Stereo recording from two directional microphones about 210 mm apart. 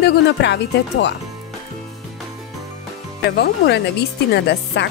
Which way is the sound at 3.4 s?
50° left (ahead or behind).